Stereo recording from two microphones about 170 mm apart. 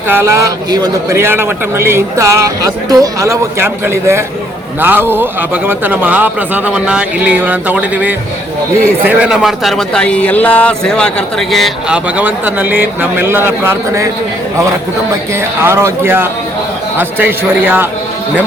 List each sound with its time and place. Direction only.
0.1 s a man's voice: 15° right (ahead or behind)
15.6 s speech: 15° right (ahead or behind)